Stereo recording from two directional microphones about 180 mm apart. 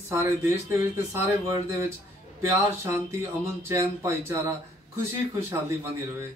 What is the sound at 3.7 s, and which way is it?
Speech, 15° right (ahead or behind).